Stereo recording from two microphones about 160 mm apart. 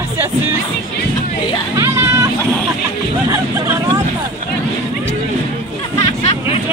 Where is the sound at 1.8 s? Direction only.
20° right (ahead or behind).